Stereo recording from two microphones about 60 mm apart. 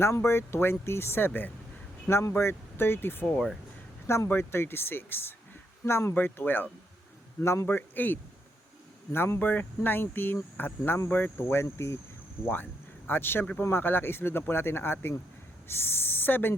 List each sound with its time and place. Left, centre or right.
0.0 s speech: left
2.0 s speech: left
6.1 s speech: left
7.4 s speech: left
7.8 s speech: left
13.1 s speech: left